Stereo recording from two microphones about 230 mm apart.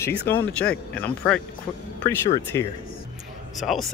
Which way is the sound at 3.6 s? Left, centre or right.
Centre.